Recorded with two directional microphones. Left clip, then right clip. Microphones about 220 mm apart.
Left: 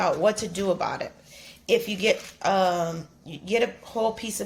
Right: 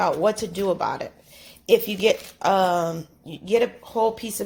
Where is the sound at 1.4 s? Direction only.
30° right (ahead or behind).